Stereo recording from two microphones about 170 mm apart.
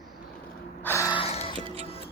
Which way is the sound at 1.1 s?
35° left (ahead or behind).